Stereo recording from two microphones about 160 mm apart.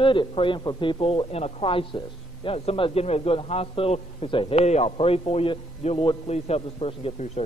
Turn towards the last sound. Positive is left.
turn(degrees=40)  # may be behind; listen again after turning